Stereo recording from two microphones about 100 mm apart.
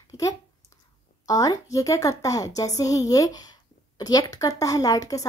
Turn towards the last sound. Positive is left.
turn(degrees=35)  # may be behind; listen again after turning